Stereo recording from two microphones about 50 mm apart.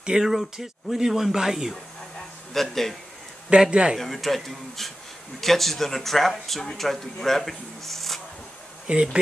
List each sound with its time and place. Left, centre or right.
0.2 s speech: centre
2.5 s speech: centre
3.4 s speech: centre
4.0 s speech: centre
8.8 s speech: centre